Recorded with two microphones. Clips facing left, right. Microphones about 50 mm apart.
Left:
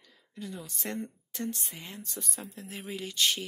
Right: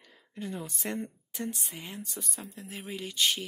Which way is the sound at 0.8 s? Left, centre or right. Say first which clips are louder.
Left 2 dB; centre.